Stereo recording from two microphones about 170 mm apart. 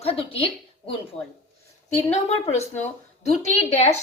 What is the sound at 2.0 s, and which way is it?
A woman's voice, 40° left (ahead or behind).